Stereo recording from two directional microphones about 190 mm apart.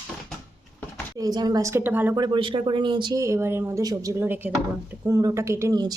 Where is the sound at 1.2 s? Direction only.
20° right (ahead or behind).